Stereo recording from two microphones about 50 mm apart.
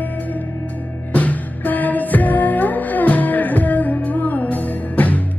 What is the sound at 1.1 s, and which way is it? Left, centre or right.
Music, left.